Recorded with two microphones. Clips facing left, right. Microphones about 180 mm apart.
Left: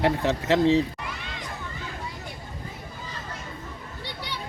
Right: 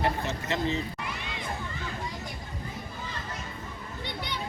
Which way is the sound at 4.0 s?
15° right (ahead or behind).